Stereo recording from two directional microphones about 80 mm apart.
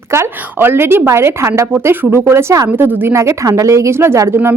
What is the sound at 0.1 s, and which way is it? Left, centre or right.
A woman's voice, right.